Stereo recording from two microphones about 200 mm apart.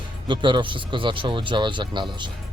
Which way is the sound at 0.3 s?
25° right (ahead or behind).